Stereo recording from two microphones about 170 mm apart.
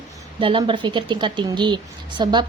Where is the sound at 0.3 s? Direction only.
30° right (ahead or behind).